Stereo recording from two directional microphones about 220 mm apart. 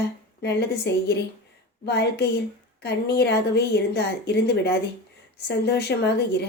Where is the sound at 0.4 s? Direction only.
50° left (ahead or behind).